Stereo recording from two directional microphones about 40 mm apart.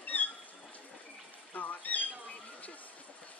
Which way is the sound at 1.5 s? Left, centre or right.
Left.